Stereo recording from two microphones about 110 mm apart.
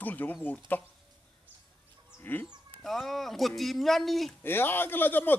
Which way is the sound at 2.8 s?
Centre (ahead or behind).